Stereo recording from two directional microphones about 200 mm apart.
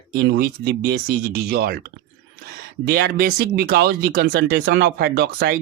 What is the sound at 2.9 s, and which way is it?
Speech, 50° right (ahead or behind).